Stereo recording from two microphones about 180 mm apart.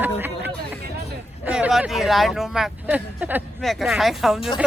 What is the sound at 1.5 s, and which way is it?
Speech, 5° right (ahead or behind).